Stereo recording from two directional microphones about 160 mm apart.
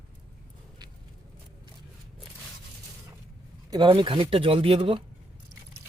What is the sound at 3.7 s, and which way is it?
Speech, 30° right (ahead or behind).